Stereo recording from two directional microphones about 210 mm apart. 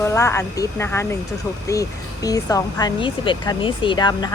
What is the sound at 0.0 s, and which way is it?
Speech, 15° left (ahead or behind).